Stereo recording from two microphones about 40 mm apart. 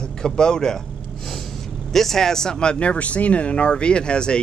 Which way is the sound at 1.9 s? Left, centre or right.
Centre.